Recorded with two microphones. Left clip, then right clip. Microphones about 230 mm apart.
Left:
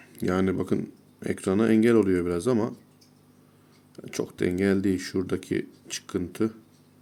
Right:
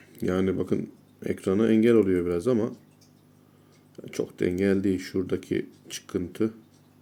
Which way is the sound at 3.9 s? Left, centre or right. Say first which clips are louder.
Right 1 dB; centre.